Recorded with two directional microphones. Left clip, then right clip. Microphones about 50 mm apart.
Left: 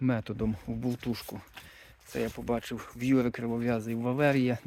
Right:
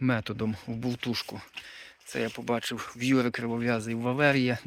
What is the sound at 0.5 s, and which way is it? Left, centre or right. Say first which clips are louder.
Speech: right 1 dB; left.